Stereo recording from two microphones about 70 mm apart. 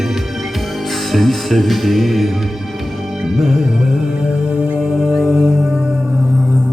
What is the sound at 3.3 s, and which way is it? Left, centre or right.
Music, centre.